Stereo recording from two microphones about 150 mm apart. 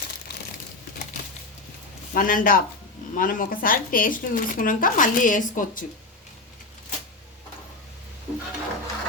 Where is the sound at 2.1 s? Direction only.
65° left (ahead or behind).